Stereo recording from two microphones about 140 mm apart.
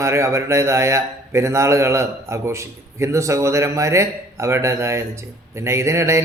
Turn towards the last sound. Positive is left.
turn(degrees=-20)  # may be behind; listen again after turning